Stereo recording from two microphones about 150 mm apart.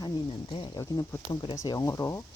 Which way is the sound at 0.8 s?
20° left (ahead or behind).